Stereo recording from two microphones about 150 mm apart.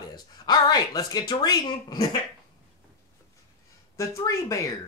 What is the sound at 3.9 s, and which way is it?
Speech, 20° left (ahead or behind).